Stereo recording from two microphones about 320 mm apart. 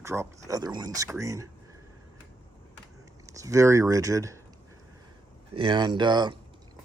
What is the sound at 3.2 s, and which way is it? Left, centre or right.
Speech, centre.